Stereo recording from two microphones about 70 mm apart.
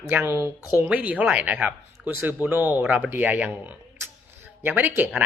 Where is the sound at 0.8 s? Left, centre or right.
Centre.